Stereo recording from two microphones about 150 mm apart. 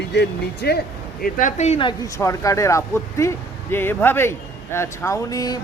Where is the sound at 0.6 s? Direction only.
90° left.